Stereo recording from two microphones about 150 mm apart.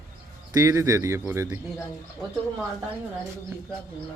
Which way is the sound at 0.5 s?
20° right (ahead or behind).